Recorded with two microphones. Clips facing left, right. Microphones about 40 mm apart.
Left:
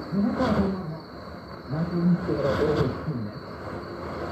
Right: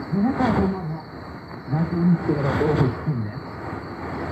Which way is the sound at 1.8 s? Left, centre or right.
Right.